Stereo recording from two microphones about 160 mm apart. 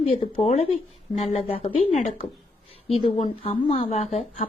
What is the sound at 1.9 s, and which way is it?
Speech, 45° left (ahead or behind).